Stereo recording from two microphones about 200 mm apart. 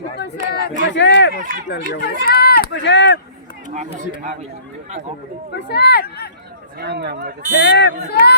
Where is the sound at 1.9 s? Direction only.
50° left (ahead or behind).